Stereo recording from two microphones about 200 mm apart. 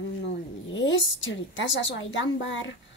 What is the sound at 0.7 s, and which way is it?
A woman's voice, 70° left (ahead or behind).